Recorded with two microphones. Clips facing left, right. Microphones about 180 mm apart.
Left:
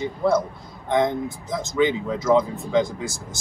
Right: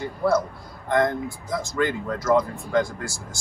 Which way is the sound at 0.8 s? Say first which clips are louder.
Left 1 dB; centre (ahead or behind).